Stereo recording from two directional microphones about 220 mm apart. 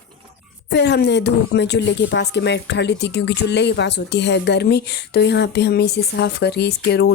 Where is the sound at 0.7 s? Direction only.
50° left (ahead or behind).